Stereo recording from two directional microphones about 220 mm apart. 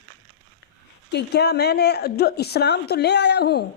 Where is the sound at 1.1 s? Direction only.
50° left (ahead or behind).